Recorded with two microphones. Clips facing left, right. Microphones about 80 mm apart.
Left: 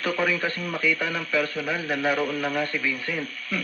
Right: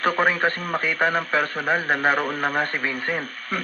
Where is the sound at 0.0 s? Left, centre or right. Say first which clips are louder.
Right 5 dB; right.